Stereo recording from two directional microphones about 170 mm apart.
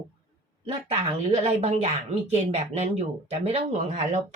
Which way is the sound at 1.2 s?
40° right (ahead or behind).